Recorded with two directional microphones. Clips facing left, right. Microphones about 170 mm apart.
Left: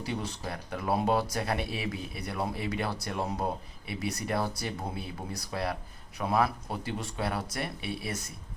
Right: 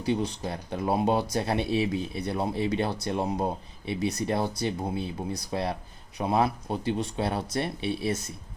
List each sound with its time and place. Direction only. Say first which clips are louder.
0.0 s speech: right 7 dB; 20° right (ahead or behind)